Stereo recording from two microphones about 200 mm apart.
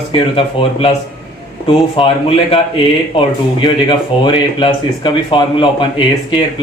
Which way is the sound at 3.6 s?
25° left (ahead or behind).